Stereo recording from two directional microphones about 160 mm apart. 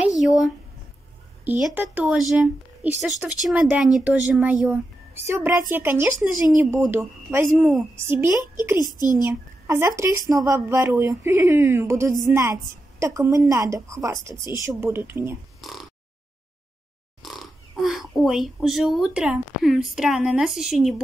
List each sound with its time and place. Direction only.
0.2 s a woman's voice: centre (ahead or behind)
8.8 s a woman's voice: 25° left (ahead or behind)
9.2 s a woman's voice: 15° right (ahead or behind)
15.6 s a sound: centre (ahead or behind)
17.2 s speech: centre (ahead or behind)